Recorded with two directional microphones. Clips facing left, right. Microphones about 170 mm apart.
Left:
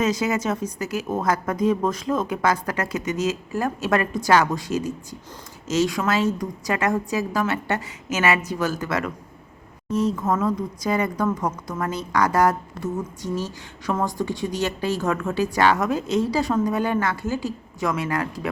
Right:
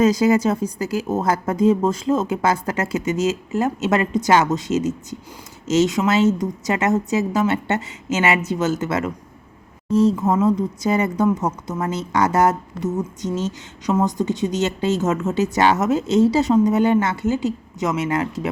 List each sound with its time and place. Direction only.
0.0 s a woman's voice: 35° right (ahead or behind)